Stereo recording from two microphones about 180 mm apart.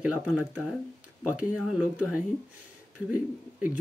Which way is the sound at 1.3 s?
10° right (ahead or behind).